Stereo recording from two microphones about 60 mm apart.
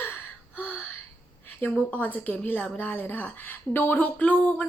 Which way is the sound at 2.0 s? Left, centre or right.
Left.